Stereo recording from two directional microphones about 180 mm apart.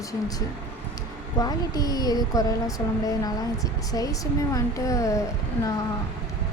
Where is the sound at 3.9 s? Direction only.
20° left (ahead or behind).